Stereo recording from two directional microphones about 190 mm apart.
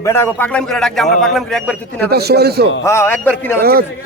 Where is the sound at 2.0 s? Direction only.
55° right (ahead or behind).